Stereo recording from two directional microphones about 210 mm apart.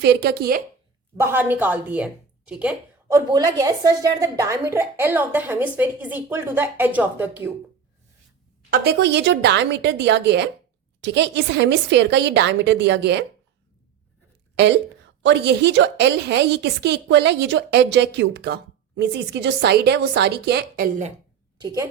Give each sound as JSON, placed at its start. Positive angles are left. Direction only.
{"t": 0.0, "sound": "a woman's voice", "side_deg": -50}
{"t": 1.1, "sound": "a woman's voice", "side_deg": -10}
{"t": 3.1, "sound": "a woman's voice", "side_deg": -20}
{"t": 8.7, "sound": "a woman's voice", "side_deg": -50}
{"t": 15.2, "sound": "a woman's voice", "side_deg": -55}
{"t": 21.6, "sound": "a woman's voice", "side_deg": -15}